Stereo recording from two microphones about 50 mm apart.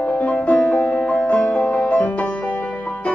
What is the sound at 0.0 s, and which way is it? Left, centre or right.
Music, left.